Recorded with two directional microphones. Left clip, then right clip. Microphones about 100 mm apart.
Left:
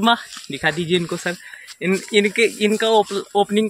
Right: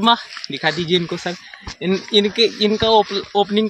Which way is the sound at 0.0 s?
Centre (ahead or behind).